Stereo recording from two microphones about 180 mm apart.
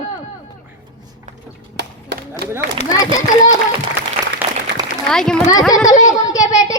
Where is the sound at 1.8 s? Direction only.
75° right (ahead or behind).